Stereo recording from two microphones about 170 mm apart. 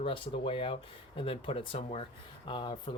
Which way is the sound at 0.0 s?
30° left (ahead or behind).